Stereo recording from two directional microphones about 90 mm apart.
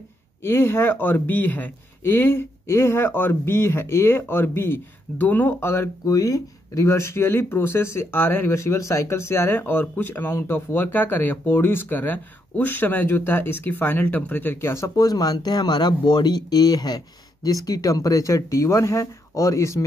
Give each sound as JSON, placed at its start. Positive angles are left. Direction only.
{"t": 0.4, "sound": "speech", "side_deg": 25}
{"t": 6.0, "sound": "speech", "side_deg": 40}
{"t": 15.0, "sound": "speech", "side_deg": 45}